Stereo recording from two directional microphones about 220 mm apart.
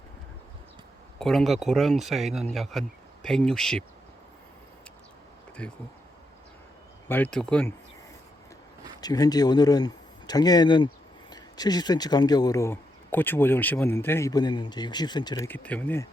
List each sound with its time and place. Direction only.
1.2 s speech: centre (ahead or behind)
5.6 s speech: 5° left (ahead or behind)
7.1 s speech: 5° left (ahead or behind)
9.0 s speech: 15° left (ahead or behind)